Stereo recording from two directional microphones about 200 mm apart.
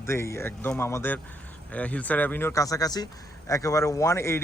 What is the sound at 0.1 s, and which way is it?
A man's voice, 15° left (ahead or behind).